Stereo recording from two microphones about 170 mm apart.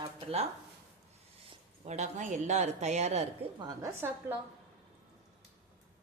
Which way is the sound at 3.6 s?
20° right (ahead or behind).